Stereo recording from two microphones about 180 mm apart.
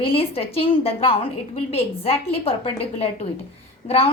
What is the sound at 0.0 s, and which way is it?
A woman's voice, 30° left (ahead or behind).